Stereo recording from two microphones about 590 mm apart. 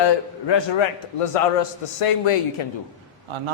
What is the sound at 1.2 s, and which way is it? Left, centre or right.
A man's voice, left.